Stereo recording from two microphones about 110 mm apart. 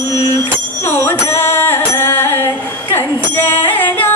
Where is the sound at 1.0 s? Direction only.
20° left (ahead or behind).